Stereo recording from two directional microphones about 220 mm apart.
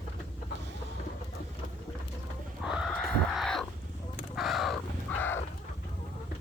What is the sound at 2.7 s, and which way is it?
Chicken, centre (ahead or behind).